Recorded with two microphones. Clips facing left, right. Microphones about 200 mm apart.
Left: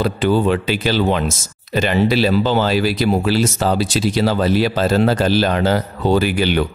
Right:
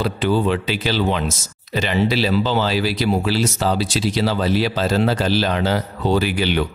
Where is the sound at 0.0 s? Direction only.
50° left (ahead or behind).